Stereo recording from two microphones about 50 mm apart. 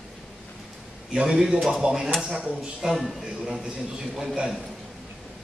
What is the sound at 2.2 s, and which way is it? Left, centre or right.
Speech, right.